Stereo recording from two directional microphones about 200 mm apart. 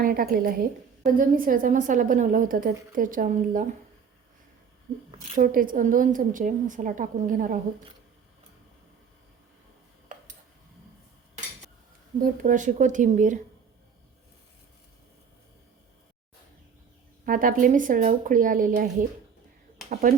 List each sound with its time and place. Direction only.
0.0 s a woman's voice: 45° right (ahead or behind)
5.4 s a woman's voice: 45° right (ahead or behind)
12.2 s a woman's voice: 40° right (ahead or behind)
17.2 s a woman's voice: 45° right (ahead or behind)